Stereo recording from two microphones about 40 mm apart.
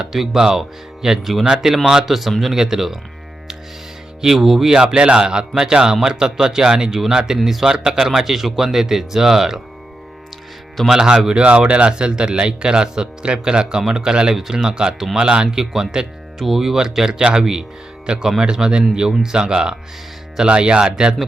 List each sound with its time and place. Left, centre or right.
0.1 s a man's voice: centre
4.2 s a man's voice: centre
10.8 s a man's voice: centre